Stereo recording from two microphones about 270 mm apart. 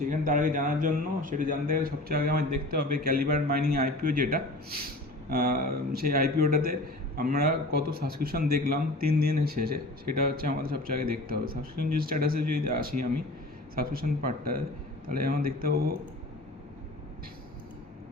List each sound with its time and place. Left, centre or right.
0.1 s a man's voice: right